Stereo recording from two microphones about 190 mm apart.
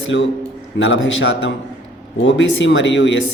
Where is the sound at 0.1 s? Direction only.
75° left (ahead or behind).